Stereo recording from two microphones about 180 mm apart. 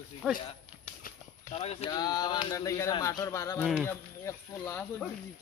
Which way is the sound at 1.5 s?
35° left (ahead or behind).